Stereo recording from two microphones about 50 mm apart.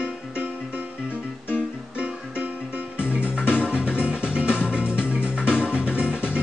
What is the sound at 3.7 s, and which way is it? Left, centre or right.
Music, right.